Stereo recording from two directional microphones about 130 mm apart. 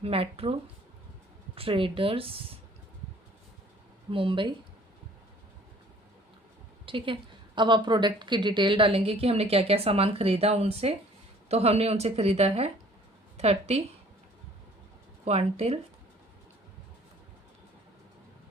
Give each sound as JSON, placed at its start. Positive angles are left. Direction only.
{"t": 0.0, "sound": "a woman's voice", "side_deg": -50}
{"t": 4.1, "sound": "speech", "side_deg": -40}
{"t": 6.8, "sound": "a woman's voice", "side_deg": -40}
{"t": 15.2, "sound": "a woman's voice", "side_deg": -50}